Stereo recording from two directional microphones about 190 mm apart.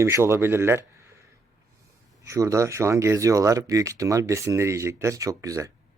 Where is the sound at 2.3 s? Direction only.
15° right (ahead or behind).